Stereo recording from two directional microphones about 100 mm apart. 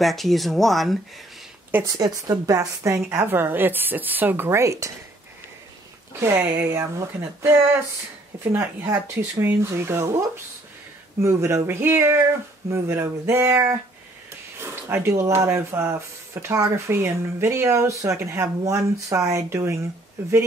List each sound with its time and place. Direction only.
0.0 s speech: centre (ahead or behind)
1.9 s speech: 40° right (ahead or behind)
6.1 s speech: 25° right (ahead or behind)
8.9 s speech: 20° right (ahead or behind)